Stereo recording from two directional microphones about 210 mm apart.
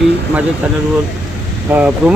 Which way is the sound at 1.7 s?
5° right (ahead or behind).